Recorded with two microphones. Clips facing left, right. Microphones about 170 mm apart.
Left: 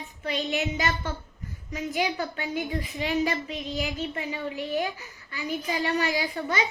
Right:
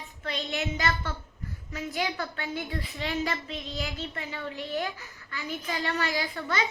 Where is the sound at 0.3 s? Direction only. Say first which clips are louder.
Left 4 dB; 15° left (ahead or behind).